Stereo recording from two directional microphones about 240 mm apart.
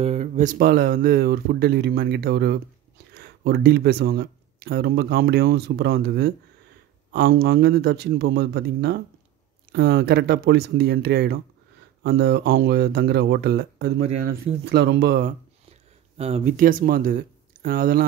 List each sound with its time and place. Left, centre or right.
0.0 s speech: right
16.2 s speech: right